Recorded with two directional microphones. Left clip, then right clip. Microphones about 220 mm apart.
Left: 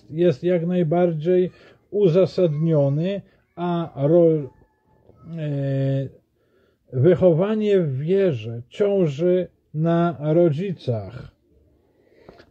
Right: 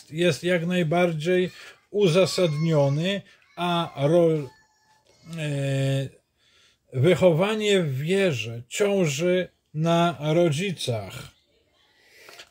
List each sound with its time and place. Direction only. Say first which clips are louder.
0.1 s speech: left 3 dB; 15° right (ahead or behind)